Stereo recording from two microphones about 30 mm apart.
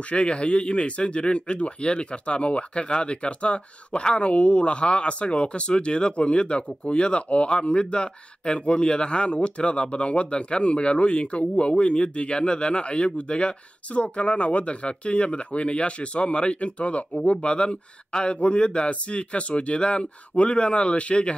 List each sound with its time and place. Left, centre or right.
0.1 s speech: left